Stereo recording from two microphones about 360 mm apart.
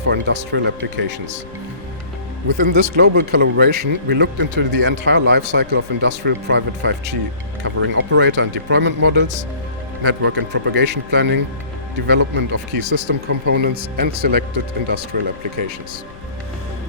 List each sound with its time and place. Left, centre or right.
0.0 s speech: right
2.7 s speech: right